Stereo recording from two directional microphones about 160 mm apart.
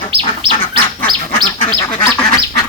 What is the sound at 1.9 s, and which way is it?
Duck, 20° left (ahead or behind).